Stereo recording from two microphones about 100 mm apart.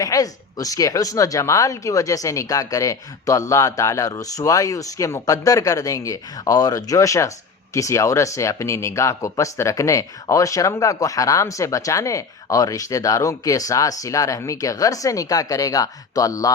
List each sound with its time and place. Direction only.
0.0 s speech: 35° left (ahead or behind)